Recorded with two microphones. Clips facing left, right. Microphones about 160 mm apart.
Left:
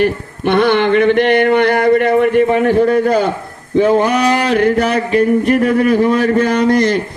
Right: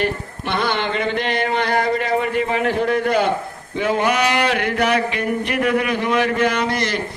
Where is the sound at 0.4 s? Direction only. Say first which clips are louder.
Left 10 dB; 55° left (ahead or behind); by 3.2 s 40° left (ahead or behind).